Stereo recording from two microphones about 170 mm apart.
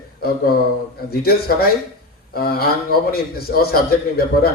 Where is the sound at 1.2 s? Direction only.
65° left (ahead or behind).